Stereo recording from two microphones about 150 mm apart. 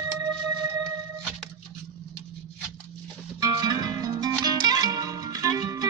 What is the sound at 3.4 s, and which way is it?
Music, 25° right (ahead or behind).